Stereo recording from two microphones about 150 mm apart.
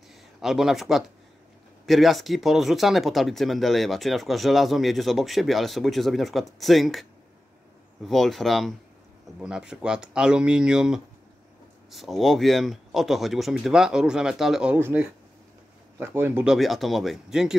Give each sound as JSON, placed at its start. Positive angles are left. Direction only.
{"t": 0.4, "sound": "speech", "side_deg": 0}
{"t": 16.4, "sound": "speech", "side_deg": 0}